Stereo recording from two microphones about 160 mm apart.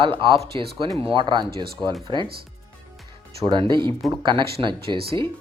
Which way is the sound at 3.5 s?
30° right (ahead or behind).